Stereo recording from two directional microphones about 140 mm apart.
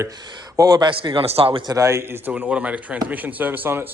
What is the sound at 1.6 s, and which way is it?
Speech, 25° right (ahead or behind).